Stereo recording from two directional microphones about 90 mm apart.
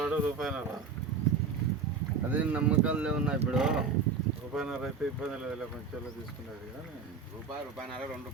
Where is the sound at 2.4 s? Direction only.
15° right (ahead or behind).